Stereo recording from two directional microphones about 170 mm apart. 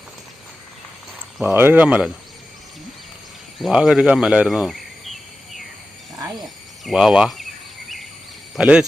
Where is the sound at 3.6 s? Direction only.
5° right (ahead or behind).